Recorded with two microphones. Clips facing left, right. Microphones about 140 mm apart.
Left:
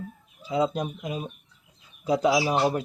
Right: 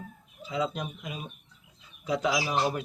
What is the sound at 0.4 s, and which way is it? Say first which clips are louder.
Speech: left 6 dB; 35° left (ahead or behind).